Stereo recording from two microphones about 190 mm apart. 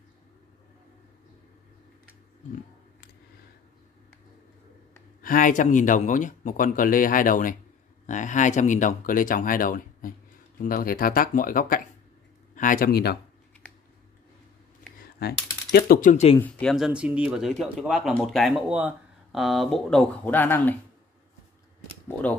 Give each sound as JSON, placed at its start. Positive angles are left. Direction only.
{"t": 5.2, "sound": "speech", "side_deg": 45}
{"t": 15.2, "sound": "speech", "side_deg": 55}
{"t": 16.3, "sound": "speech", "side_deg": 5}